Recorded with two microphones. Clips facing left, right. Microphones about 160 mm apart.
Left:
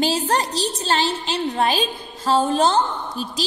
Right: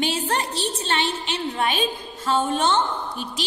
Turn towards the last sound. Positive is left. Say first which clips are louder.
# left 2 dB
turn(degrees=35)  # may be behind; listen again after turning